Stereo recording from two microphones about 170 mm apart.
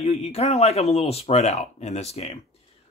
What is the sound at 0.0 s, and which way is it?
Speech, 40° left (ahead or behind).